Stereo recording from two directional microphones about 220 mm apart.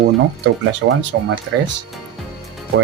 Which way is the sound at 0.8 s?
55° right (ahead or behind).